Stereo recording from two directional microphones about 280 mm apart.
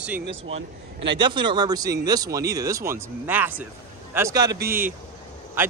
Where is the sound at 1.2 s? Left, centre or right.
Centre.